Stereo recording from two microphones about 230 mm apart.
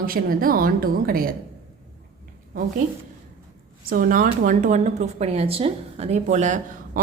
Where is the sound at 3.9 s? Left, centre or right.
Right.